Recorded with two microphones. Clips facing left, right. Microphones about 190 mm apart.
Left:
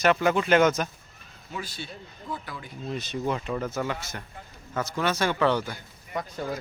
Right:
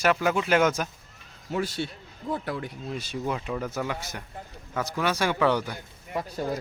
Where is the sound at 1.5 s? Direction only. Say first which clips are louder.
Right 8 dB; 65° right (ahead or behind).